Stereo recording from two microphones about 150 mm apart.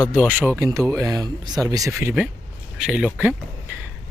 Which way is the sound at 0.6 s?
25° right (ahead or behind).